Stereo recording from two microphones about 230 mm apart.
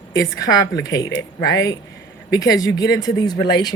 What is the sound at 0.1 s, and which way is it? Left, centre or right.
A woman's voice, centre.